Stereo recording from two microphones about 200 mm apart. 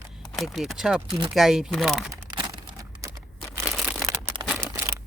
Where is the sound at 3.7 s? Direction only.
Centre (ahead or behind).